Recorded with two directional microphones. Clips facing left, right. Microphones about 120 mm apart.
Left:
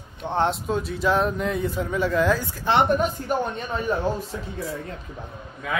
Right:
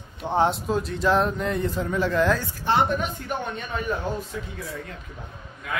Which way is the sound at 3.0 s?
35° left (ahead or behind).